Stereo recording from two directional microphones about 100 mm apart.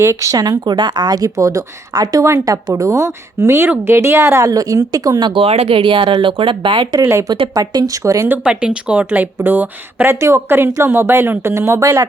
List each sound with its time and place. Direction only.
0.0 s speech: 30° right (ahead or behind)
5.3 s speech: 80° right; by 6.8 s 55° right (ahead or behind)
7.0 s speech: 25° right (ahead or behind)
7.5 s speech: 40° right (ahead or behind)
8.3 s speech: 10° right (ahead or behind); by 12.0 s 30° right (ahead or behind)